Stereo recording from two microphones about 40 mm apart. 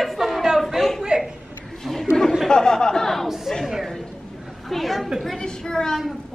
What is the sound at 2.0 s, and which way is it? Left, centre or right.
Chatter, centre.